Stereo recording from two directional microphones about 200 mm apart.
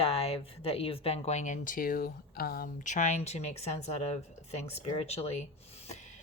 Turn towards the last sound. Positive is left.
turn(degrees=35)  # may be behind; listen again after turning